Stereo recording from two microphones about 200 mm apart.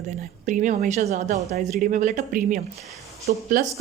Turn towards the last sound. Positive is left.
turn(degrees=-40)  # may be behind; listen again after turning